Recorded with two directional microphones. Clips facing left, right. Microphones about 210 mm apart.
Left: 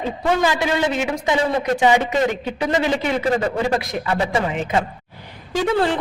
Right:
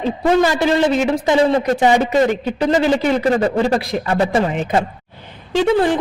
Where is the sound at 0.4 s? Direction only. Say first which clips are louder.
Right 4 dB; 40° right (ahead or behind).